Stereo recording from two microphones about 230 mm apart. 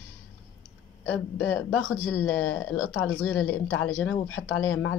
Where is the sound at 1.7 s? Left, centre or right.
Left.